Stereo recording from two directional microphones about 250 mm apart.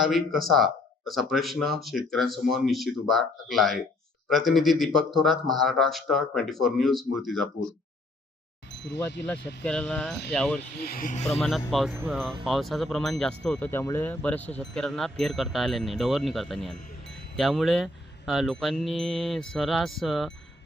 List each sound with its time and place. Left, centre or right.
0.0 s speech: centre
8.8 s speech: left
9.6 s speech: centre
10.8 s speech: left
11.3 s speech: centre